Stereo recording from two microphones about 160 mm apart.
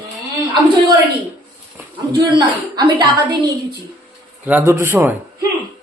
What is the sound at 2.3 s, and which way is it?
Speech, 25° right (ahead or behind).